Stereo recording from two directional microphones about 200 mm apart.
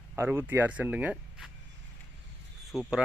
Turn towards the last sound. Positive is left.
turn(degrees=0)  # may be behind; listen again after turning